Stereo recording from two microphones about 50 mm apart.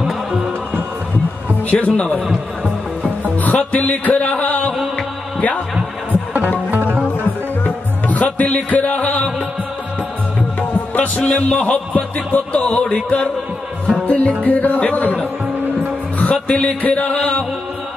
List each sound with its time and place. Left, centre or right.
1.7 s speech: left
3.3 s music: left
6.7 s music: right
7.6 s music: left
8.6 s speech: left
9.0 s music: left
11.0 s speech: left
14.0 s music: left
14.4 s speech: left
16.2 s music: left